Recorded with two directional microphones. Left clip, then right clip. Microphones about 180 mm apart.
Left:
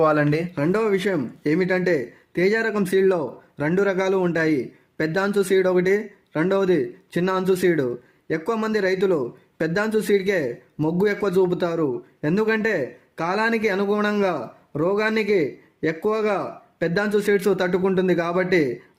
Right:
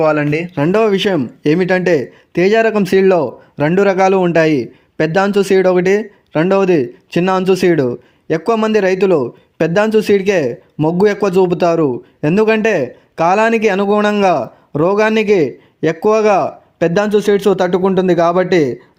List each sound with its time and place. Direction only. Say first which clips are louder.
0.0 s speech: right 5 dB; 10° right (ahead or behind)
0.5 s speech: right 11 dB; 35° right (ahead or behind)